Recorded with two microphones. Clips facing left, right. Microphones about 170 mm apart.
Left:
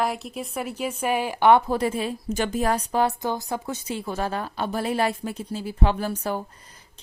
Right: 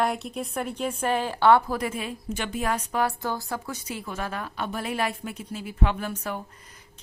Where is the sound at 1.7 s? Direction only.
30° left (ahead or behind).